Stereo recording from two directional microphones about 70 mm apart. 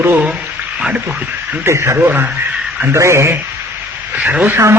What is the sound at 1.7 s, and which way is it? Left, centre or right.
A woman's voice, right.